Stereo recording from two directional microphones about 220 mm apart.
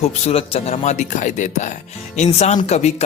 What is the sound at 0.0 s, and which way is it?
A man's voice, 30° left (ahead or behind).